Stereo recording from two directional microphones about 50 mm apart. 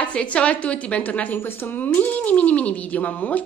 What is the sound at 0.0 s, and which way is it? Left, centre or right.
A woman's voice, left.